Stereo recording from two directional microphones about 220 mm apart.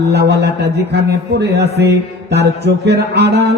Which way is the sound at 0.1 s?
50° right (ahead or behind).